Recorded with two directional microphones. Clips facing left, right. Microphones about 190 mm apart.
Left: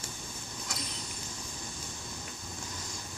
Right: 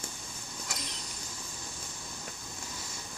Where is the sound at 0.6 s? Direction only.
Centre (ahead or behind).